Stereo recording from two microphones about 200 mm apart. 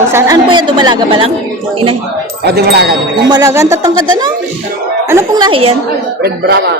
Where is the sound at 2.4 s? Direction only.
55° right (ahead or behind).